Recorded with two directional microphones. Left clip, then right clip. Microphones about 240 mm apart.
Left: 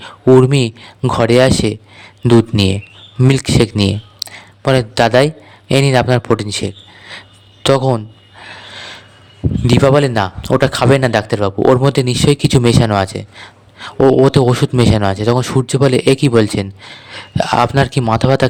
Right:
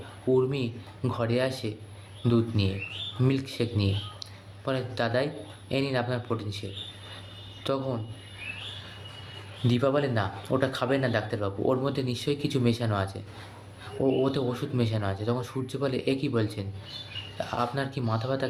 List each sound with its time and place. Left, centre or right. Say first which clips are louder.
0.3 s speech: left 16 dB; left
9.6 s speech: left 14 dB; left